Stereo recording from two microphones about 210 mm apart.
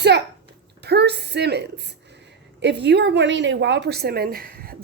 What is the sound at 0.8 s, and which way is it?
A woman's voice, 50° right (ahead or behind).